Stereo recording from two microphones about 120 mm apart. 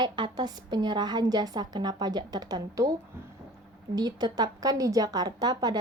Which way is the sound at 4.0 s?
35° right (ahead or behind).